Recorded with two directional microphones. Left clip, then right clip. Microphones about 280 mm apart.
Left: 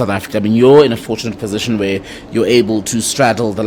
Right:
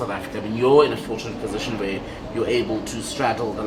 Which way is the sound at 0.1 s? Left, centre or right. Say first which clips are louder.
Left 11 dB; left.